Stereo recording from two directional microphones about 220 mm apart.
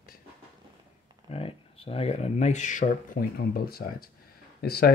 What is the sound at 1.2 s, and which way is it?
Speech, 25° left (ahead or behind).